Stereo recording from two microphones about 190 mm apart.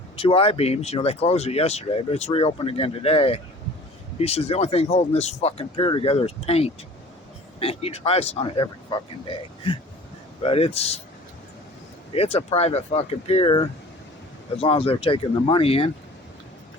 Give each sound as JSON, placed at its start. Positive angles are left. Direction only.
{"t": 0.2, "sound": "speech", "side_deg": 30}
{"t": 12.1, "sound": "speech", "side_deg": 30}